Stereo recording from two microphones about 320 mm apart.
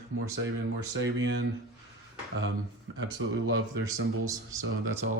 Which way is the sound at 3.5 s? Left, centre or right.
Right.